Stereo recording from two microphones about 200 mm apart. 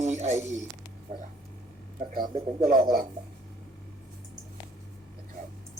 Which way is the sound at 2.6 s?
45° right (ahead or behind).